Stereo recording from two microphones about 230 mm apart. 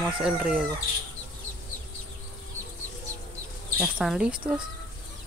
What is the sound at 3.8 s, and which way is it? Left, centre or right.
Speech, centre.